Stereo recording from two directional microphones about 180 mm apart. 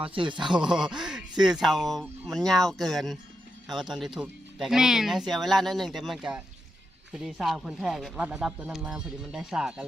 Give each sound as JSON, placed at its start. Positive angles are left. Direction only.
{"t": 0.0, "sound": "speech", "side_deg": -30}
{"t": 0.6, "sound": "speech", "side_deg": -5}